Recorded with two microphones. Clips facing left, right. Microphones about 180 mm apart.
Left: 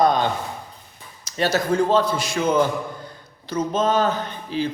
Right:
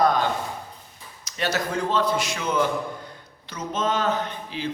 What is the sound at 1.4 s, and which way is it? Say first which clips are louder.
A man's voice: left 6 dB; 30° left (ahead or behind).